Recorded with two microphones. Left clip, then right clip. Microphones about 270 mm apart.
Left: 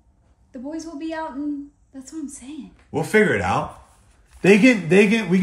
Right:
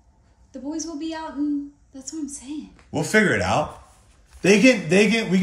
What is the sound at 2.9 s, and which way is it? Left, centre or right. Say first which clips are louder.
Speech: left 1 dB; centre.